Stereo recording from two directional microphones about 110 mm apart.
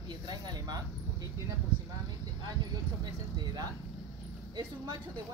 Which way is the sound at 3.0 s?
40° right (ahead or behind).